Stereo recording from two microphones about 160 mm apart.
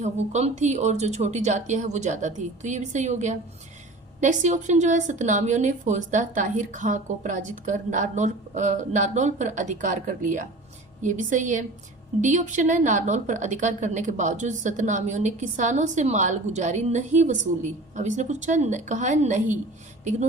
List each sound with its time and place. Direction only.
0.0 s a woman's voice: 45° right (ahead or behind)